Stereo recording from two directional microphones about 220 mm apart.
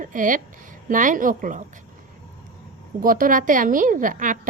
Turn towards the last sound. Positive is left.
turn(degrees=-35)  # may be behind; listen again after turning